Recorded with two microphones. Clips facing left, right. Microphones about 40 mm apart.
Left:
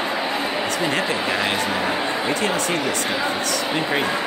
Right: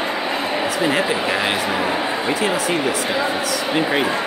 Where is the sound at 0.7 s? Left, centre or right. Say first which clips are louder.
Right 4 dB; centre.